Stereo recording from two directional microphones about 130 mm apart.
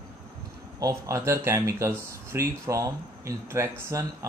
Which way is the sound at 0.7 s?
25° right (ahead or behind).